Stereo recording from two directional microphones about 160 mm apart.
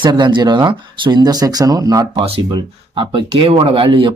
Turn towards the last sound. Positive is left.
turn(degrees=-35)  # may be behind; listen again after turning